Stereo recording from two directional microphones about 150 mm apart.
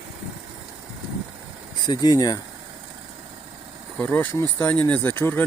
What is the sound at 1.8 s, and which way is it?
Speech, 25° left (ahead or behind).